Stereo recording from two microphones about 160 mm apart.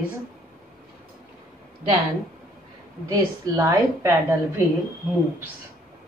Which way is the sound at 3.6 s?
15° right (ahead or behind).